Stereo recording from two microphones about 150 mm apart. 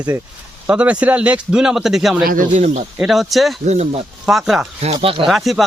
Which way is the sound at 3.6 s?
50° right (ahead or behind).